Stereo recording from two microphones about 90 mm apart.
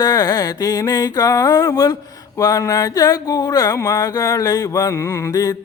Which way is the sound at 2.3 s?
40° left (ahead or behind).